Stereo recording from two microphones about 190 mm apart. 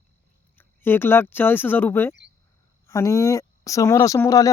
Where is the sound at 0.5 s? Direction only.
10° left (ahead or behind).